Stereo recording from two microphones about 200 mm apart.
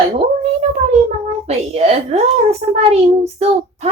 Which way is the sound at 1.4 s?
30° right (ahead or behind).